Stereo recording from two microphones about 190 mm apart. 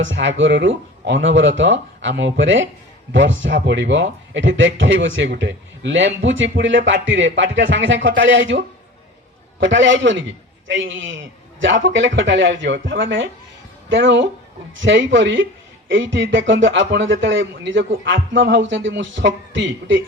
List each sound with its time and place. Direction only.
0.0 s speech: 75° right (ahead or behind)